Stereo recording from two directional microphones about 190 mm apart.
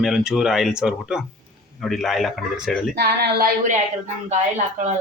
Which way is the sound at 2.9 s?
55° right (ahead or behind).